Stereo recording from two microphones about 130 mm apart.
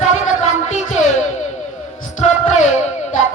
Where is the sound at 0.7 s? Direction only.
60° left (ahead or behind).